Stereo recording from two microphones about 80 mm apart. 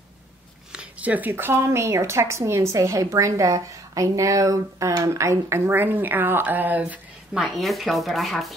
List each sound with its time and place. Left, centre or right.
0.7 s a woman's voice: centre
6.8 s speech: centre